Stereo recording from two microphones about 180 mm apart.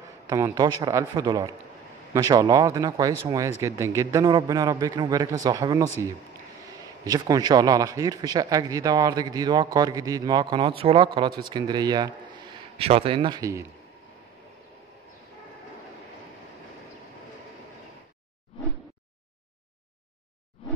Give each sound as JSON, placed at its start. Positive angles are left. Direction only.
{"t": 0.3, "sound": "speech", "side_deg": -20}
{"t": 7.1, "sound": "speech", "side_deg": -20}
{"t": 20.6, "sound": "a sound", "side_deg": 30}